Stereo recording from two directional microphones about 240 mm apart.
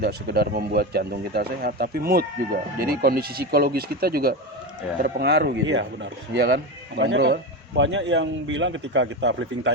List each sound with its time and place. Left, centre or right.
0.0 s speech: right